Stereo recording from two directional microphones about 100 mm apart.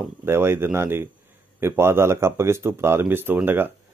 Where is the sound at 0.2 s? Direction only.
25° right (ahead or behind).